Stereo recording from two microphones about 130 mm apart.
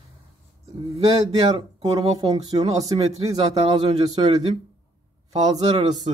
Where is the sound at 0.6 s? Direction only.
55° right (ahead or behind).